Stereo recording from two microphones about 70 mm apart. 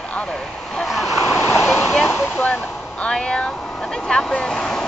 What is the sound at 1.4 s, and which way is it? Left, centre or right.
Speech, left.